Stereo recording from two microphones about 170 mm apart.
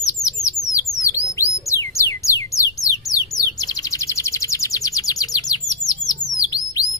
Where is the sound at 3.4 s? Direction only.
20° left (ahead or behind).